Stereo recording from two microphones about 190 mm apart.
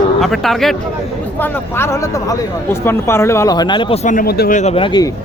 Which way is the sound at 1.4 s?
15° left (ahead or behind).